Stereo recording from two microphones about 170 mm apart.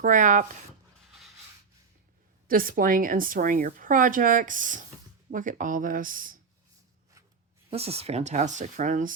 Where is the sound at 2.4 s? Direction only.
55° right (ahead or behind).